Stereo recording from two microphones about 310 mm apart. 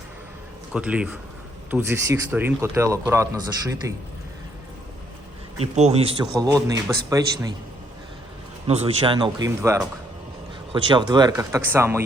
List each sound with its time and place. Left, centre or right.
0.7 s a man's voice: centre
5.7 s speech: right
6.3 s a man's voice: centre
8.6 s a man's voice: centre